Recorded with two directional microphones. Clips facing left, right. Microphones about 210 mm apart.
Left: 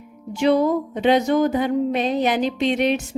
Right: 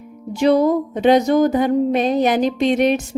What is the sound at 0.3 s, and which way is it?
A woman's voice, 40° right (ahead or behind).